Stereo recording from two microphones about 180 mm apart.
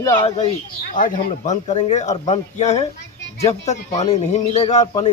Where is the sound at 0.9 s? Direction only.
45° left (ahead or behind).